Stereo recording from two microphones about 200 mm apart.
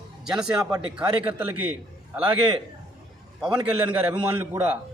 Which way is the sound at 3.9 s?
10° right (ahead or behind).